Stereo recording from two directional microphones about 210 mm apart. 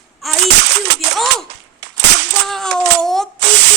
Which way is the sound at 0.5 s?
55° right (ahead or behind).